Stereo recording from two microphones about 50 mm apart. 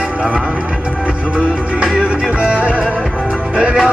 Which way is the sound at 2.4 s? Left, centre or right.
Right.